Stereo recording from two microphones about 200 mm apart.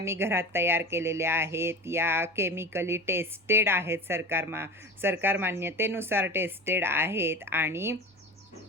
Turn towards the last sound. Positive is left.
turn(degrees=-10)  # may be behind; listen again after turning